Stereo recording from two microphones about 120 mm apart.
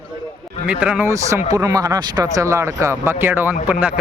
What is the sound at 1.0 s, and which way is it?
Speech, 25° right (ahead or behind).